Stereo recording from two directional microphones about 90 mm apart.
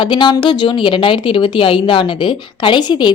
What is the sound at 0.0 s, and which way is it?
A woman's voice, 60° left (ahead or behind).